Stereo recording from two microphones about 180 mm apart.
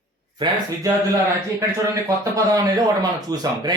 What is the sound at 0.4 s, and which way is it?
Speech, 25° right (ahead or behind).